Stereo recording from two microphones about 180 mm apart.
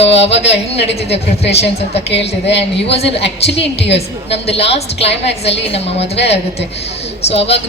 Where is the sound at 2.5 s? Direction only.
75° left (ahead or behind).